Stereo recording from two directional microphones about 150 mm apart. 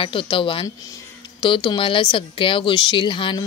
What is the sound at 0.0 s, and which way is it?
A woman's voice, 35° left (ahead or behind).